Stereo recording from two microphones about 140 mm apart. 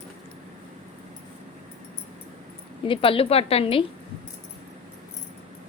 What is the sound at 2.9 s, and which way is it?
Speech, 40° left (ahead or behind).